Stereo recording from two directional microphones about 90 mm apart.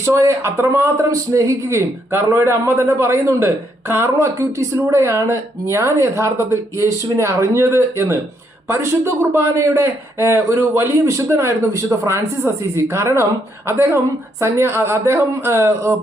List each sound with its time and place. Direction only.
0.0 s speech: 35° right (ahead or behind)